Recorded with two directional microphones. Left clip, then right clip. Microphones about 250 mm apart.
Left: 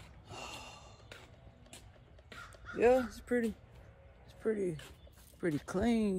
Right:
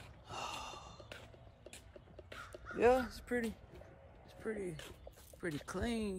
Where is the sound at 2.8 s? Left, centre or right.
Centre.